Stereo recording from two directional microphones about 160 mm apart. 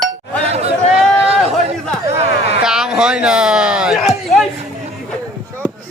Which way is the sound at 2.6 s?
5° right (ahead or behind).